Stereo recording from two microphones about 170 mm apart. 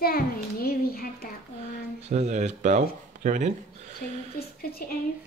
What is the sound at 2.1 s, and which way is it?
Speech, 40° right (ahead or behind).